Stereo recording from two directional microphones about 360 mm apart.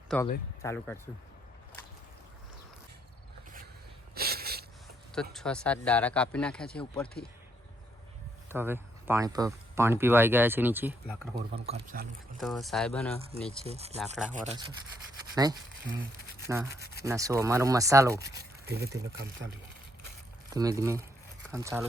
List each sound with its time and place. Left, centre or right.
0.1 s speech: centre
4.1 s a sound: right
5.3 s speech: centre
8.4 s speech: centre
11.5 s speech: centre
12.4 s speech: centre
13.7 s speech: centre
16.5 s speech: centre
18.6 s speech: right
20.5 s speech: centre